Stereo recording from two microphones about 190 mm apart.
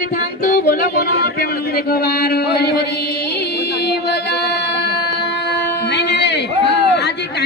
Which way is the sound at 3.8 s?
60° left (ahead or behind).